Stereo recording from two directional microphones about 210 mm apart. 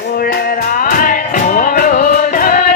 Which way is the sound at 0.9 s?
40° left (ahead or behind).